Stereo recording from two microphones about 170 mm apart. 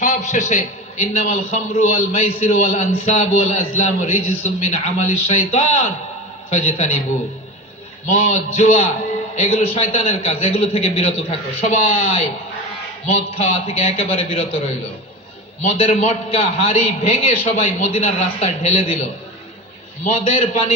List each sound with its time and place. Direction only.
0.0 s a man's voice: 45° left (ahead or behind)
8.0 s a man's voice: 45° left (ahead or behind)
15.6 s a man's voice: 40° left (ahead or behind)
20.1 s a man's voice: 40° left (ahead or behind)